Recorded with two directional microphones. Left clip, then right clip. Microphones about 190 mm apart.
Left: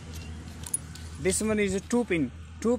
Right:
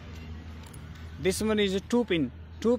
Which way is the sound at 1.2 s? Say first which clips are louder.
Even; 10° right (ahead or behind).